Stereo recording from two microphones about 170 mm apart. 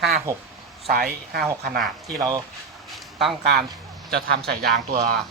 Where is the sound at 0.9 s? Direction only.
65° right (ahead or behind).